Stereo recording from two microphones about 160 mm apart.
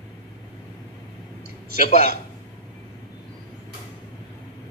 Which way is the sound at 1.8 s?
45° left (ahead or behind).